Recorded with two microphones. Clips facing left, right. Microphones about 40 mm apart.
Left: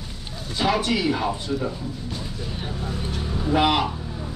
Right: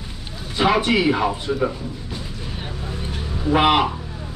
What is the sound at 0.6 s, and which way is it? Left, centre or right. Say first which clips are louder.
Speech: right 4 dB; right.